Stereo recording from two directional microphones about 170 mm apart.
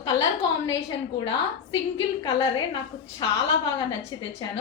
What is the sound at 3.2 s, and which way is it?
Speech, 25° left (ahead or behind).